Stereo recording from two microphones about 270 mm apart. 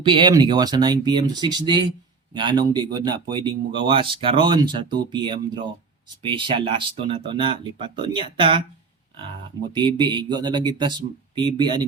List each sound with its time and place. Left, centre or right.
0.0 s speech: centre
9.6 s speech: centre